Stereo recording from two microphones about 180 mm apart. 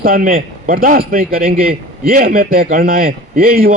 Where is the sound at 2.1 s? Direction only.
55° right (ahead or behind).